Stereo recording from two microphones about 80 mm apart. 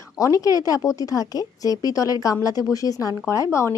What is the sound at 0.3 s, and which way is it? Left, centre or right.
A woman's voice, left.